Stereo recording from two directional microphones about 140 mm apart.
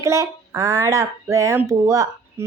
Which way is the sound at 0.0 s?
20° right (ahead or behind).